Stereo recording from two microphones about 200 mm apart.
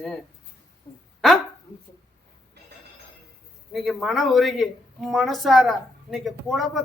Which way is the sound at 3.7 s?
Centre (ahead or behind).